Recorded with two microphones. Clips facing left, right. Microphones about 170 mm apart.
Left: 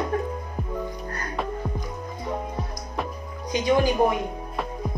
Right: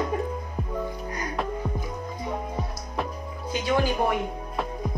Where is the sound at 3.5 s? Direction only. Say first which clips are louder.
Left 3 dB; 15° left (ahead or behind).